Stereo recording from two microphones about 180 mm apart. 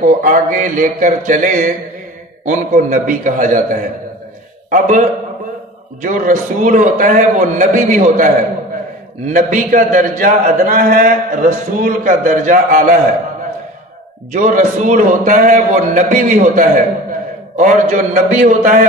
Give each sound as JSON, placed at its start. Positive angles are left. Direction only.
{"t": 0.0, "sound": "a man's voice", "side_deg": -45}
{"t": 6.0, "sound": "a man's voice", "side_deg": -45}
{"t": 9.3, "sound": "a man's voice", "side_deg": -45}
{"t": 14.3, "sound": "a man's voice", "side_deg": -45}